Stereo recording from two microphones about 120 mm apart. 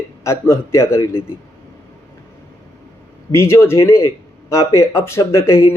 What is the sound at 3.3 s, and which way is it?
Speech, 25° left (ahead or behind).